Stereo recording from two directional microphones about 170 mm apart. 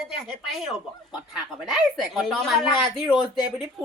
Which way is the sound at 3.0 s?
25° left (ahead or behind).